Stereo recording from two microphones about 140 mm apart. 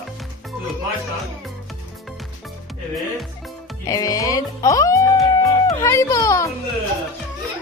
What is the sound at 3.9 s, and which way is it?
A child's voice, 25° left (ahead or behind).